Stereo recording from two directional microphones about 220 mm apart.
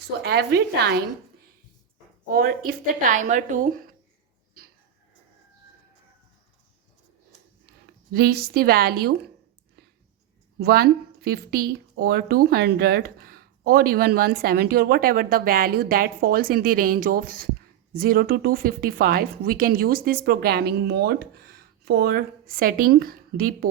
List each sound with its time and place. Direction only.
0.2 s a woman's voice: 45° right (ahead or behind)
2.2 s a woman's voice: 40° right (ahead or behind)
8.1 s a woman's voice: 45° right (ahead or behind)
10.6 s a woman's voice: 45° right (ahead or behind)